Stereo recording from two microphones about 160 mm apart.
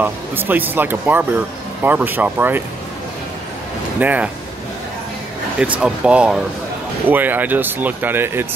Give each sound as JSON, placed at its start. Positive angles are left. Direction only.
{"t": 0.0, "sound": "speech", "side_deg": -10}
{"t": 4.0, "sound": "speech", "side_deg": -10}
{"t": 5.6, "sound": "speech", "side_deg": -5}